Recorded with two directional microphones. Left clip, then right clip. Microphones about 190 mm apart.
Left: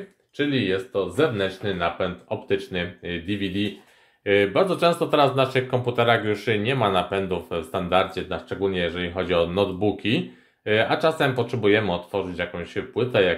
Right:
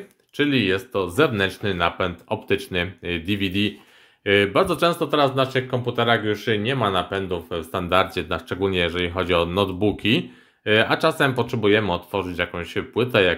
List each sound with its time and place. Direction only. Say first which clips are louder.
0.4 s speech: right 3 dB; 35° right (ahead or behind); by 7.8 s 15° right (ahead or behind)
7.9 s speech: right 2 dB; 30° right (ahead or behind)